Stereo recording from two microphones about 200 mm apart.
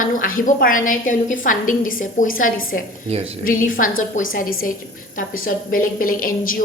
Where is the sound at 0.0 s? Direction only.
40° left (ahead or behind).